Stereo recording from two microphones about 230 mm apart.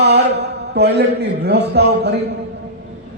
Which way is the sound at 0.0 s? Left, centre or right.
Right.